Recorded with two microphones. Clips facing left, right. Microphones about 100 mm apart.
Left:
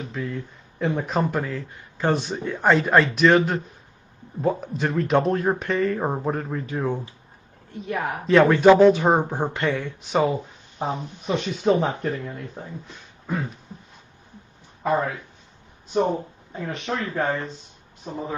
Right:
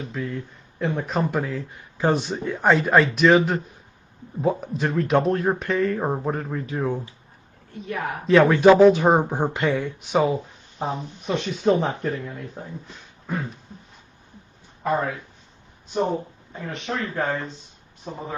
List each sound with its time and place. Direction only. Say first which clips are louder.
0.1 s speech: even; centre (ahead or behind)
2.1 s speech: right 1 dB; 15° right (ahead or behind)
2.4 s speech: even; centre (ahead or behind)
7.9 s a woman's voice: left 2 dB; 25° left (ahead or behind)
8.3 s speech: even; centre (ahead or behind)
9.7 s speech: right 2 dB; centre (ahead or behind)
16.6 s speech: left 1 dB; 15° left (ahead or behind)
17.1 s speech: left 2 dB; centre (ahead or behind)